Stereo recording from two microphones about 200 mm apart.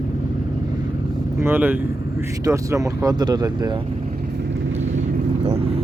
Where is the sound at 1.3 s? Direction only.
10° right (ahead or behind).